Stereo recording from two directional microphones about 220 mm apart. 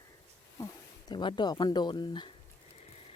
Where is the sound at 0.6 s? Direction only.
20° left (ahead or behind).